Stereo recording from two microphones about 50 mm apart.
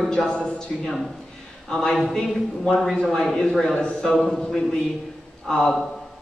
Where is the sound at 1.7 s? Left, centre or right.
Centre.